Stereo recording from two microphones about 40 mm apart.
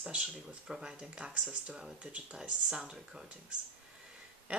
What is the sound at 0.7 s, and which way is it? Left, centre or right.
Speech, centre.